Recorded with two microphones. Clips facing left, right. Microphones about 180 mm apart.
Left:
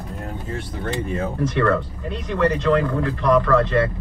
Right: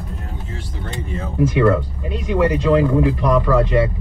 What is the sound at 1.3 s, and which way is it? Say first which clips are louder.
Speech: right 6 dB; 10° right (ahead or behind).